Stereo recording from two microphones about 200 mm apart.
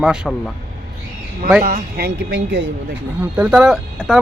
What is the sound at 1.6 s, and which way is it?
Speech, 50° right (ahead or behind).